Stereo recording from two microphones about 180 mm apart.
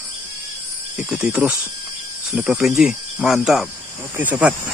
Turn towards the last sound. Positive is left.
turn(degrees=-10)  # may be behind; listen again after turning